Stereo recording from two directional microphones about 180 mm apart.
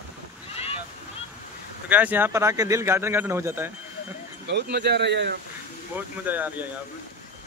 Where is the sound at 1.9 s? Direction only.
10° right (ahead or behind).